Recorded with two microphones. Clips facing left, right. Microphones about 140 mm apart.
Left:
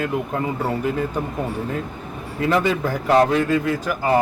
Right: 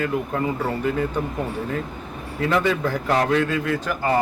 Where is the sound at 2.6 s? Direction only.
15° left (ahead or behind).